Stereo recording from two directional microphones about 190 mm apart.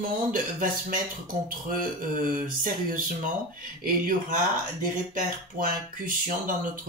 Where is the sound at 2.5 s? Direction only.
45° right (ahead or behind).